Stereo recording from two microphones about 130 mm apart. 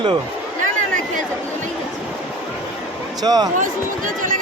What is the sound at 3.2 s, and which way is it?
Speech, 30° right (ahead or behind).